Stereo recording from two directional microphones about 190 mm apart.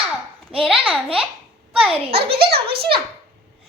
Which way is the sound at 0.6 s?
5° right (ahead or behind).